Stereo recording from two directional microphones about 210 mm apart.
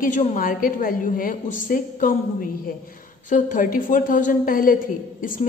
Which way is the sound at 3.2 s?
40° left (ahead or behind).